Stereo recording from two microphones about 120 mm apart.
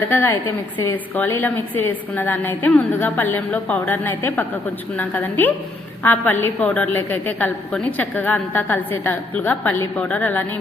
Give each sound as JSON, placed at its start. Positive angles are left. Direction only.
{"t": 0.1, "sound": "a woman's voice", "side_deg": 20}